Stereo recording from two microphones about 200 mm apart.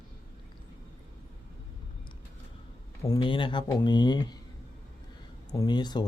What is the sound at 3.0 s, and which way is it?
Speech, 20° left (ahead or behind).